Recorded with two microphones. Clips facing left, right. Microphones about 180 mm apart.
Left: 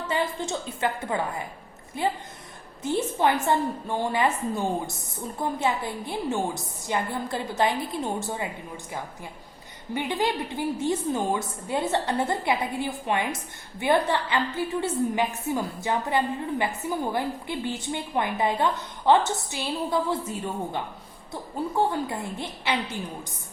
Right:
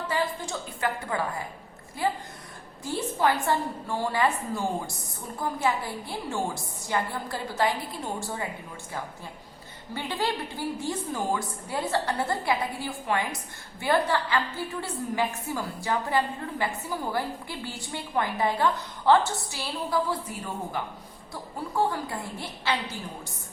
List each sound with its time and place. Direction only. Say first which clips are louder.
0.1 s a woman's voice: left 3 dB; 25° left (ahead or behind)
9.9 s a woman's voice: left 3 dB; 20° left (ahead or behind)